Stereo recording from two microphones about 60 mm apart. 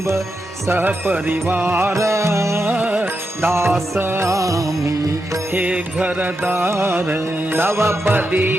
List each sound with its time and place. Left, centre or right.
0.7 s music: right
2.0 s music: right
2.6 s music: right
3.4 s music: right
4.3 s music: right
5.5 s music: right
8.1 s music: right